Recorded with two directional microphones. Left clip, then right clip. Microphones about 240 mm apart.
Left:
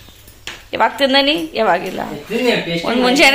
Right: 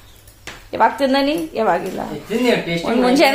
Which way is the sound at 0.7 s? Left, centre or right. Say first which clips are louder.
Left 1 dB; centre.